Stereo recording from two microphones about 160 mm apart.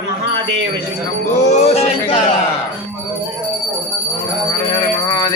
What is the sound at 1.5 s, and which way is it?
Speech, 40° left (ahead or behind).